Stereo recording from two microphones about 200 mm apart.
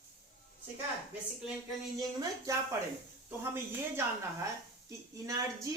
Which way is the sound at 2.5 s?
15° right (ahead or behind).